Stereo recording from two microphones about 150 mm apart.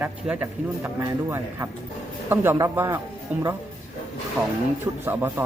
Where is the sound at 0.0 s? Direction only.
10° right (ahead or behind).